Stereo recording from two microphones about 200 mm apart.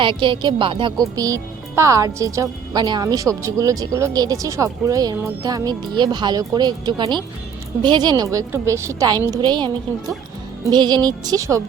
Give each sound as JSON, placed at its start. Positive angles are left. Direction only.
{"t": 0.0, "sound": "a woman's voice", "side_deg": -25}